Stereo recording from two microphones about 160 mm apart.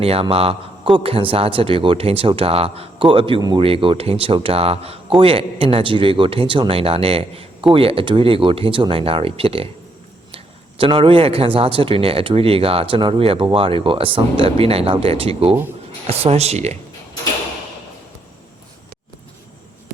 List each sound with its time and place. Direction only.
0.0 s a man's voice: 35° right (ahead or behind)